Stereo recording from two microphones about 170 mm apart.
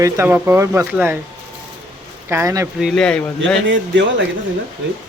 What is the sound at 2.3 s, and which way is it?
Speech, 20° right (ahead or behind).